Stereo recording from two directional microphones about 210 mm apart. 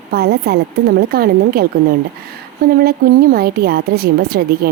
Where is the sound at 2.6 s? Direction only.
45° right (ahead or behind).